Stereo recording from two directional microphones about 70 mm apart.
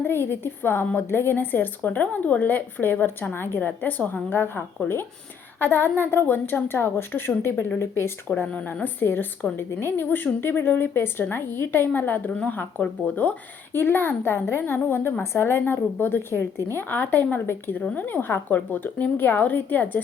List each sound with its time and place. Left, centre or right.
0.0 s a woman's voice: left
8.5 s a woman's voice: left
13.7 s a woman's voice: left